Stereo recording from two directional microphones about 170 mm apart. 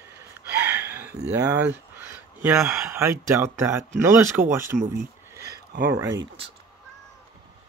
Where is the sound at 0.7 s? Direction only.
10° right (ahead or behind).